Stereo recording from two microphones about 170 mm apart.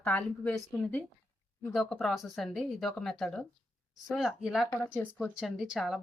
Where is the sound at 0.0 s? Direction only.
5° left (ahead or behind).